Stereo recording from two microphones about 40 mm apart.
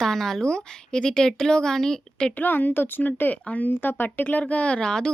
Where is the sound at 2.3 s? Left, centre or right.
Left.